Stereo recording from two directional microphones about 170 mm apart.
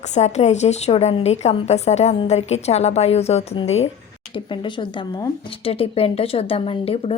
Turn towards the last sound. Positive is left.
turn(degrees=35)  # may be behind; listen again after turning